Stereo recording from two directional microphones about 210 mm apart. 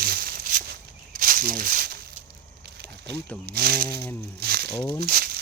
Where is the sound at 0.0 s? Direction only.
45° right (ahead or behind).